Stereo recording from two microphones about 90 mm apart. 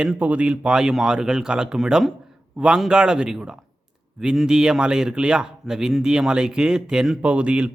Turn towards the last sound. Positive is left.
turn(degrees=-15)  # may be behind; listen again after turning